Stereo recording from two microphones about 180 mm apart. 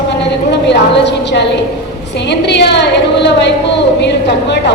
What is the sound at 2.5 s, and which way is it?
A woman's voice, 70° left (ahead or behind).